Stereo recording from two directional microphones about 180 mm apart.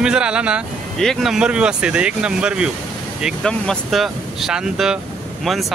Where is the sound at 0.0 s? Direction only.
5° right (ahead or behind).